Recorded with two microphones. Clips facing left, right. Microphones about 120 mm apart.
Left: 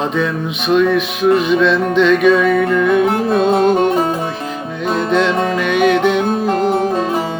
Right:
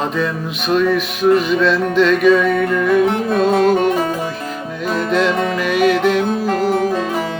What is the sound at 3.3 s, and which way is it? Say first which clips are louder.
Music: left 1 dB; 25° left (ahead or behind).